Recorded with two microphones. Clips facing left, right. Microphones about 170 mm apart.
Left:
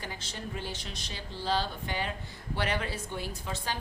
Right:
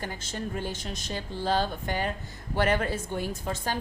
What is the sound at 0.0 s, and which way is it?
A woman's voice, 50° right (ahead or behind).